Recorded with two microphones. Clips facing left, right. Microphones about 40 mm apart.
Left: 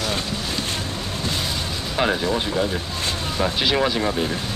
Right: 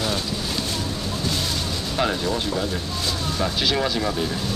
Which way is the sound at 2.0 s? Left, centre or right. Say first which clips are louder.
Left 3 dB; centre.